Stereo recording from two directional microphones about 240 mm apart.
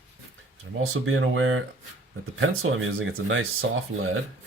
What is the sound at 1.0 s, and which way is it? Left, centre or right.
Speech, right.